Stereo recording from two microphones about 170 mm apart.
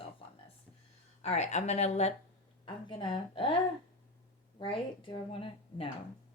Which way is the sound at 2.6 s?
30° left (ahead or behind).